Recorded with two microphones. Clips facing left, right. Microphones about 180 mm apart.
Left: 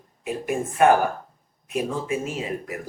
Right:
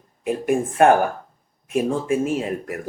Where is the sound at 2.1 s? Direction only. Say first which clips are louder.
Right 6 dB; 50° right (ahead or behind).